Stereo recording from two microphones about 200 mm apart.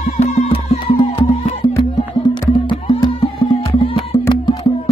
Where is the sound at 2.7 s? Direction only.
25° left (ahead or behind).